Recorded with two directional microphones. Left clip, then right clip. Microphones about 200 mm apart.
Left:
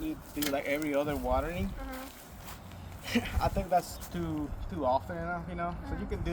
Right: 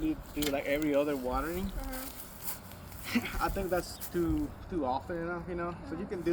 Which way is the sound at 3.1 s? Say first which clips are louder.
Left 1 dB; 45° left (ahead or behind).